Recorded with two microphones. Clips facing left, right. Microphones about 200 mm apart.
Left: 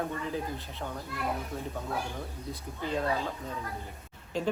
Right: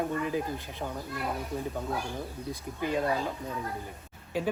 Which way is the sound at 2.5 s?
10° right (ahead or behind).